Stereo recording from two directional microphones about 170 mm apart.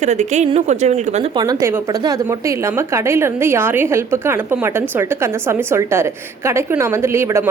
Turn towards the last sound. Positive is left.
turn(degrees=-15)  # may be behind; listen again after turning